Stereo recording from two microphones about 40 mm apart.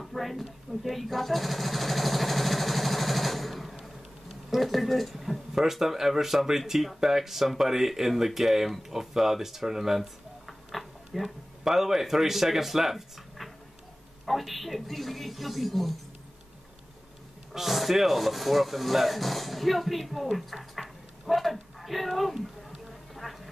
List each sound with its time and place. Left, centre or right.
0.0 s sewing machine: centre
4.5 s speech: centre
17.6 s speech: centre
23.1 s a sound: centre